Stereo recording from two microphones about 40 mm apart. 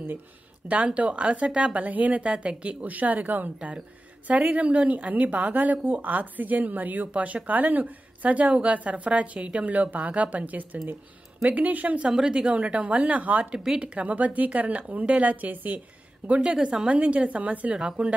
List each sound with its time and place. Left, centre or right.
0.7 s a woman's voice: right
12.1 s a woman's voice: centre
12.4 s a woman's voice: right
13.5 s speech: centre
13.7 s a woman's voice: right
16.3 s a woman's voice: right
17.7 s speech: right